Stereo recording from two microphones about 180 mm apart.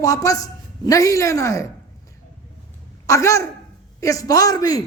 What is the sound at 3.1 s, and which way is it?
A woman's voice, 15° left (ahead or behind).